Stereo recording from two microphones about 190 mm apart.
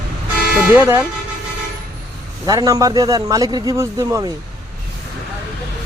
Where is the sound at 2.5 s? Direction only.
20° right (ahead or behind).